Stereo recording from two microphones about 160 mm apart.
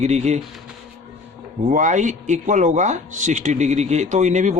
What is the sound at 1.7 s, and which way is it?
Speech, 50° right (ahead or behind).